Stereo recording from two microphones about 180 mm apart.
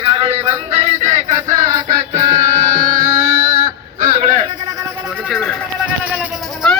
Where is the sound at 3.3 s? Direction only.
50° right (ahead or behind).